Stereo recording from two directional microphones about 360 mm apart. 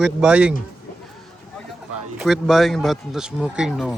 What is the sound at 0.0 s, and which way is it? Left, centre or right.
Speech, centre.